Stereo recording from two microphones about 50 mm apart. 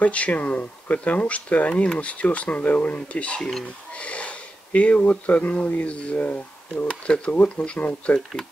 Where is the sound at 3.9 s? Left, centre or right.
Left.